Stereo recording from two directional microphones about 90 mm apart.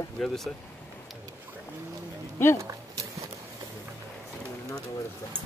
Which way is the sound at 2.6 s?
35° right (ahead or behind).